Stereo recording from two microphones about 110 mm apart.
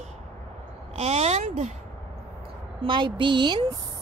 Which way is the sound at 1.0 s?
75° right (ahead or behind).